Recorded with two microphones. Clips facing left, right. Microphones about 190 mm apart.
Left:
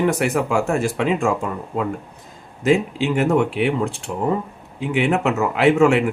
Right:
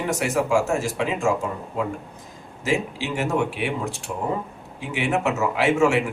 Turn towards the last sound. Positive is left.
turn(degrees=60)  # may be behind; listen again after turning